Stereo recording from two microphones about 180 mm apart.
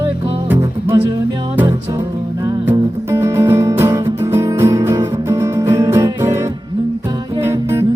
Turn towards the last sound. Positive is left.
turn(degrees=-15)  # may be behind; listen again after turning